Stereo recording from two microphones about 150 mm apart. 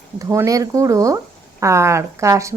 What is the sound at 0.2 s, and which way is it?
Speech, 20° right (ahead or behind).